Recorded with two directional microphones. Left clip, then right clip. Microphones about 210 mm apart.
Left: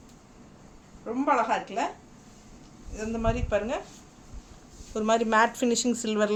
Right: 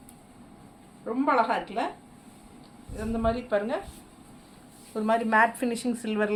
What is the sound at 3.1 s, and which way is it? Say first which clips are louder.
Speech: right 1 dB; 15° left (ahead or behind).